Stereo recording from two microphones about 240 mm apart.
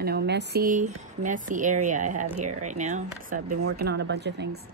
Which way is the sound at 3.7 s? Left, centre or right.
Right.